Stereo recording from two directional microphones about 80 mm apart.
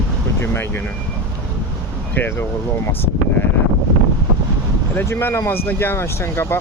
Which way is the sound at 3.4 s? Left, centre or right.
Left.